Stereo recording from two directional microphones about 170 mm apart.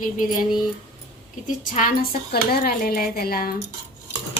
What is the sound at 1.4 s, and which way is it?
Speech, 50° left (ahead or behind).